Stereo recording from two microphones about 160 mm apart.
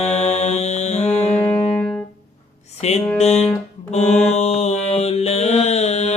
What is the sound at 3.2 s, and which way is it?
Music, 40° left (ahead or behind).